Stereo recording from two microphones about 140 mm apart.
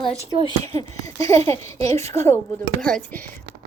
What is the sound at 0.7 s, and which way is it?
Speech, 25° left (ahead or behind).